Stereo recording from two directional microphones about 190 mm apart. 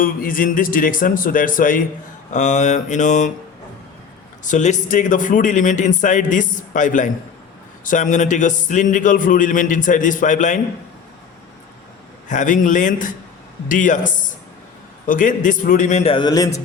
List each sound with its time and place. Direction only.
0.0 s a man's voice: 45° left (ahead or behind)
4.4 s a man's voice: 40° left (ahead or behind)
12.3 s a man's voice: 40° left (ahead or behind); by 16.6 s 20° left (ahead or behind)